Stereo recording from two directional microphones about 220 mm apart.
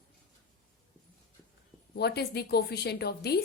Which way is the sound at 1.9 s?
45° left (ahead or behind).